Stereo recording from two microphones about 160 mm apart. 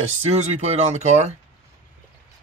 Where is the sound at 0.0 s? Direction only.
45° right (ahead or behind).